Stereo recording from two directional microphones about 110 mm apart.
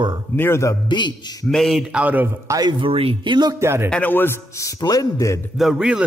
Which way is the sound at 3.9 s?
15° left (ahead or behind).